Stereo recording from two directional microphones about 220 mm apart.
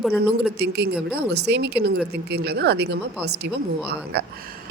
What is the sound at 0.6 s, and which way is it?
Speech, 50° right (ahead or behind).